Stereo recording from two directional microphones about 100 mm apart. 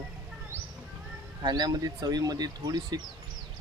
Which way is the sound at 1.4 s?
45° right (ahead or behind).